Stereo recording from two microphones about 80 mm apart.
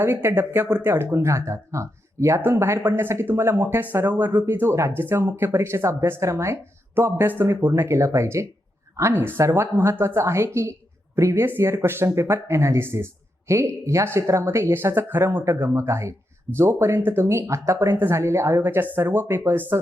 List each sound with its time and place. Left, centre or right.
0.0 s a woman's voice: right